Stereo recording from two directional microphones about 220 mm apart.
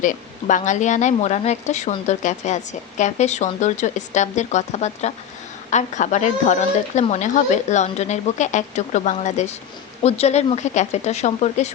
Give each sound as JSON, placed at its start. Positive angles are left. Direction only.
{"t": 0.0, "sound": "speech", "side_deg": 35}